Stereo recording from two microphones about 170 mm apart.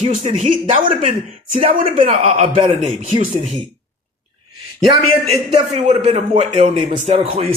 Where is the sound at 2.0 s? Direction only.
40° right (ahead or behind).